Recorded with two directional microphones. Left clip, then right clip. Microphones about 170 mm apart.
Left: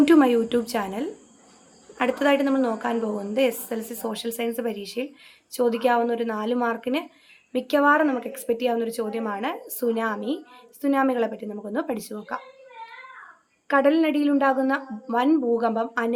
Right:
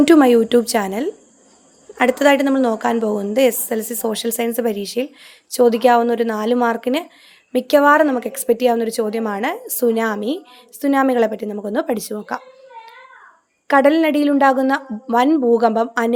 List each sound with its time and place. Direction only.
0.0 s a woman's voice: 40° right (ahead or behind)
13.7 s a woman's voice: 45° right (ahead or behind)